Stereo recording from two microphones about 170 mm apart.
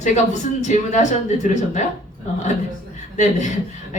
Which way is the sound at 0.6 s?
45° left (ahead or behind).